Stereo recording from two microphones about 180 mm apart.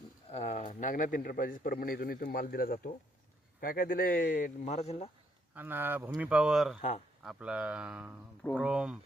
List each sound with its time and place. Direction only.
0.3 s a man's voice: 35° left (ahead or behind)
5.5 s speech: 10° right (ahead or behind)